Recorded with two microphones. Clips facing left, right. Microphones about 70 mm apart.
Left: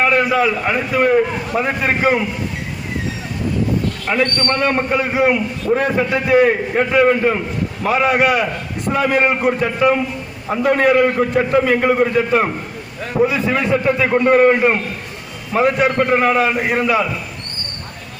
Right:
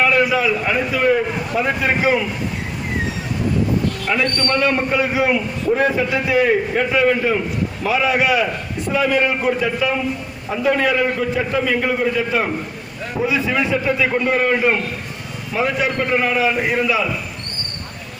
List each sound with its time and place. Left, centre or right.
0.0 s a man's voice: left
4.2 s a man's voice: left
5.7 s a man's voice: centre
6.2 s a man's voice: left
13.8 s a man's voice: left